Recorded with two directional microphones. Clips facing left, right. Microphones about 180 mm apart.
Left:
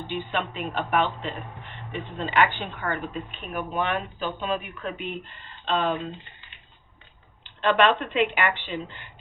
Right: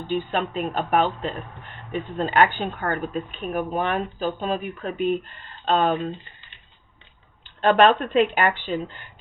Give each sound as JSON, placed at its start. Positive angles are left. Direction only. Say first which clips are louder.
{"t": 0.1, "sound": "speech", "louder": "right 6 dB", "side_deg": -40}
{"t": 7.6, "sound": "speech", "louder": "right 4 dB", "side_deg": -45}